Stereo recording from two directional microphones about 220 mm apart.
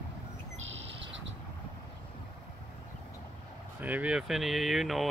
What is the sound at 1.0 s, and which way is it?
Bird, 55° right (ahead or behind).